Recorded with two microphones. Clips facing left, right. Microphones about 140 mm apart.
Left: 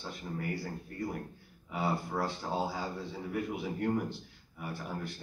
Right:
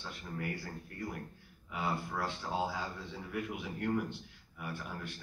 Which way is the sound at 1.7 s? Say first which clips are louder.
Left 3 dB; 35° left (ahead or behind).